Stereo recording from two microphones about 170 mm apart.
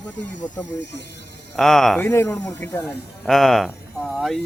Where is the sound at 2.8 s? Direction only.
Centre (ahead or behind).